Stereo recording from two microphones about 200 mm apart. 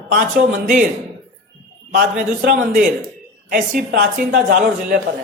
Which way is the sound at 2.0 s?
45° right (ahead or behind).